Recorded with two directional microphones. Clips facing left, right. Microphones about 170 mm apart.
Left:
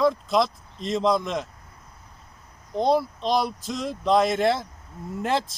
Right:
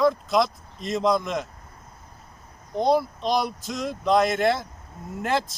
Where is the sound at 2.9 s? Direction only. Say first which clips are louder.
Even; centre (ahead or behind).